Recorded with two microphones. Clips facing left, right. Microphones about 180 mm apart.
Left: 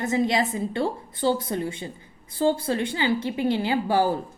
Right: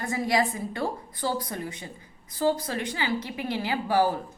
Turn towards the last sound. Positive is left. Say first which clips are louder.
# left 2 dB
turn(degrees=30)  # may be behind; listen again after turning